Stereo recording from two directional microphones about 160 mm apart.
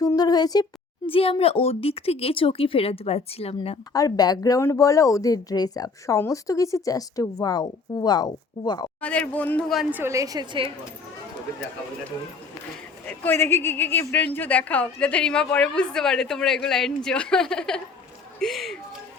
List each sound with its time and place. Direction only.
0.0 s speech: 25° left (ahead or behind)
3.9 s speech: 25° left (ahead or behind)
9.0 s a woman's voice: 10° left (ahead or behind)
9.9 s a woman's voice: 15° right (ahead or behind)
13.1 s a woman's voice: 15° left (ahead or behind)